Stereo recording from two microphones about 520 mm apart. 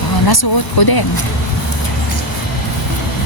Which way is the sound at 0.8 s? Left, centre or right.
Left.